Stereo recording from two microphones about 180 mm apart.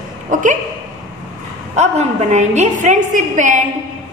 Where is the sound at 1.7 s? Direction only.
40° right (ahead or behind).